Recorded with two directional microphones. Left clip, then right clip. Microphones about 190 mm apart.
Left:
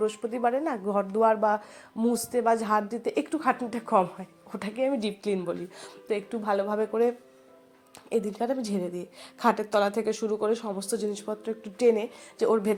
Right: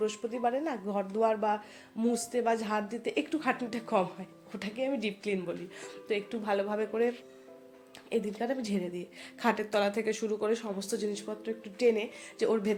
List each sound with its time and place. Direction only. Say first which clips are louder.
0.0 s speech: left 4 dB; 15° left (ahead or behind)
8.1 s speech: left 4 dB; 20° left (ahead or behind)